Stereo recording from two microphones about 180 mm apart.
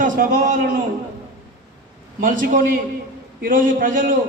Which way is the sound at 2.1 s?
50° right (ahead or behind).